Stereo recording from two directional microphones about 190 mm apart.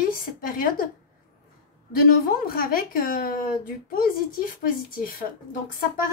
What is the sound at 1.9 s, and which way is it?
Speech, 50° left (ahead or behind).